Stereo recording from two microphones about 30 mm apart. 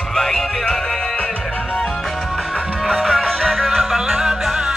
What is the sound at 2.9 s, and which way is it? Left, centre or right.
Music, left.